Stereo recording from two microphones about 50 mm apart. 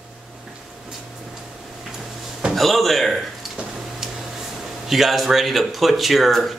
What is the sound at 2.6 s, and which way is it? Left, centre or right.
Speech, centre.